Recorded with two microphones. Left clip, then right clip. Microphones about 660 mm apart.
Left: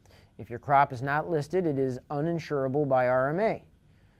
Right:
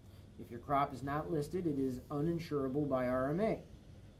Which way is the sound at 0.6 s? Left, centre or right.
Left.